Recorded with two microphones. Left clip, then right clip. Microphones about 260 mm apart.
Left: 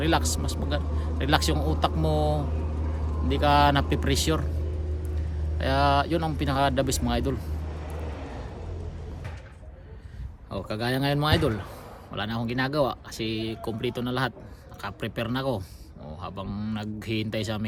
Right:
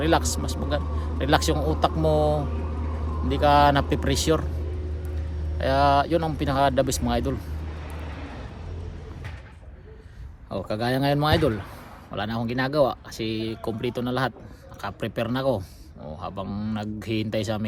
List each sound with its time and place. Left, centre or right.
0.0 s speech: centre
5.5 s speech: centre
7.9 s vehicle: left
10.5 s speech: centre